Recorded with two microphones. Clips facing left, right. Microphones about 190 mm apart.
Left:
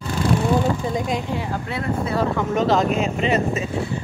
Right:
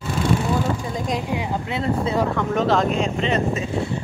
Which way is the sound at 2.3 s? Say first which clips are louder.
Left 1 dB; centre (ahead or behind).